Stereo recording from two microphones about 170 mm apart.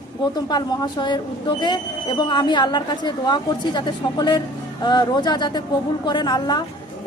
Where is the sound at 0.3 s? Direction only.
25° left (ahead or behind).